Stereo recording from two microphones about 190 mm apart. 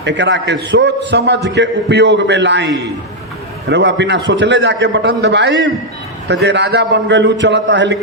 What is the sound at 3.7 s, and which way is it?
A man's voice, 65° right (ahead or behind).